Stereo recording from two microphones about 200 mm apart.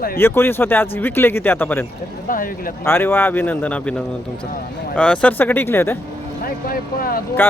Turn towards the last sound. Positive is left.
turn(degrees=45)  # may be behind; listen again after turning